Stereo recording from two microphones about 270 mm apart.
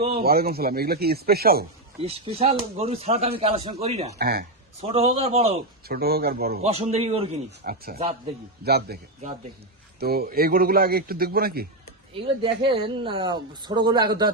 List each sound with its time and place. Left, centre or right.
0.2 s a man's voice: right
2.0 s speech: right
4.2 s a man's voice: right
4.8 s speech: right
5.9 s a man's voice: right
6.7 s speech: right
7.6 s a man's voice: right
10.0 s a man's voice: right
12.1 s speech: centre